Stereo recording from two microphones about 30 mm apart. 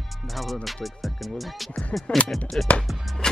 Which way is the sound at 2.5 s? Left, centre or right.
Left.